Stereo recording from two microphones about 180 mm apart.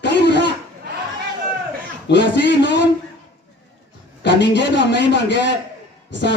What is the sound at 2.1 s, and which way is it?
Speech, 75° left (ahead or behind).